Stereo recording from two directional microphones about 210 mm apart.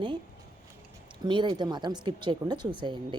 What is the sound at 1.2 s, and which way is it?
Speech, 20° right (ahead or behind).